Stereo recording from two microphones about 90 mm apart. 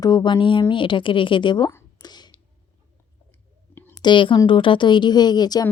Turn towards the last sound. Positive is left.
turn(degrees=50)  # may be behind; listen again after turning